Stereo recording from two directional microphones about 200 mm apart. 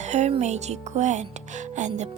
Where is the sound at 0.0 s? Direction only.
35° right (ahead or behind).